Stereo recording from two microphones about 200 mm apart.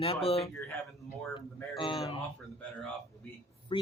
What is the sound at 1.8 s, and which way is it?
Speech, 25° left (ahead or behind).